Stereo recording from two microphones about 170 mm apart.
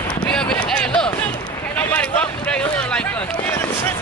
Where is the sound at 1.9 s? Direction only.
5° left (ahead or behind).